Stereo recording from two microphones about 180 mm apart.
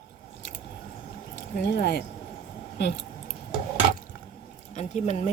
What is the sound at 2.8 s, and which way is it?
Scissors, 70° left (ahead or behind).